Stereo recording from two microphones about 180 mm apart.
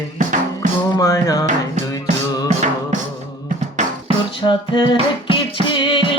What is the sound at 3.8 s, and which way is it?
Music, 40° right (ahead or behind).